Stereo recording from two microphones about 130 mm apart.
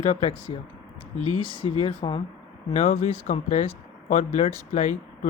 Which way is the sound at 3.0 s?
50° left (ahead or behind).